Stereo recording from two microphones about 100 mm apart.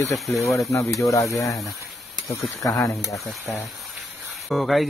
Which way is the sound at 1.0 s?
30° left (ahead or behind).